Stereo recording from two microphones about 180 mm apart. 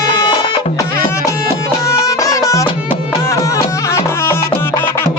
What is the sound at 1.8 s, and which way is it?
Music, 15° left (ahead or behind).